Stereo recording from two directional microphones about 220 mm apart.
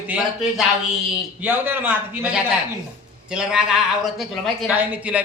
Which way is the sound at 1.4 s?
10° right (ahead or behind).